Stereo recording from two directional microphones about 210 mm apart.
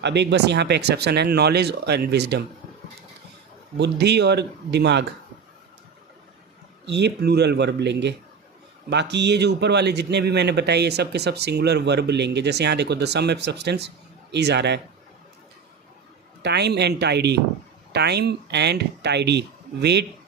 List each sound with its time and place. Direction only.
0.0 s speech: 55° right (ahead or behind)
3.8 s speech: 55° right (ahead or behind)
6.8 s speech: 55° right (ahead or behind)
16.4 s speech: 50° right (ahead or behind)